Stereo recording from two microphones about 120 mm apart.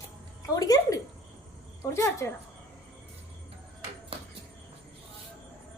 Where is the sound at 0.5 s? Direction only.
30° left (ahead or behind).